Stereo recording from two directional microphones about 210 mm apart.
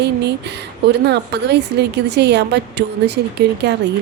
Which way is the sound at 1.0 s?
55° right (ahead or behind).